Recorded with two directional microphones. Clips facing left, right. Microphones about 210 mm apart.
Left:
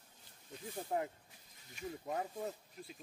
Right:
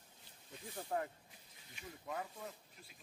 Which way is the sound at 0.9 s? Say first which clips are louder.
Left 2 dB; 15° left (ahead or behind).